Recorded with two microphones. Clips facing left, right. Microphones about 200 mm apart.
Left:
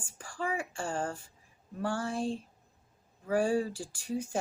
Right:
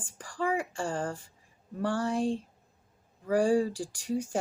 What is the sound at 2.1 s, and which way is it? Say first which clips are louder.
Speech: right 4 dB; 90° right.